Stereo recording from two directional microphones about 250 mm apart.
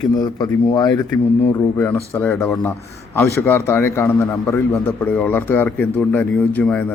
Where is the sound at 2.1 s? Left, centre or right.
Centre.